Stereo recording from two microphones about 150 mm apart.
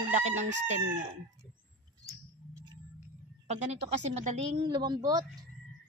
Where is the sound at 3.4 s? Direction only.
45° right (ahead or behind).